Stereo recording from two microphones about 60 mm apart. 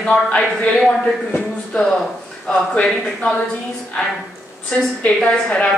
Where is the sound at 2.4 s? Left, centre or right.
Centre.